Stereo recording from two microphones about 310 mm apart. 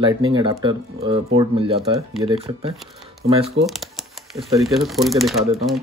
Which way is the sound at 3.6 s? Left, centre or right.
Centre.